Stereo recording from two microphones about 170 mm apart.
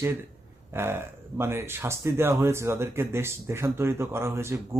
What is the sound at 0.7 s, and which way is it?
Speech, 15° right (ahead or behind).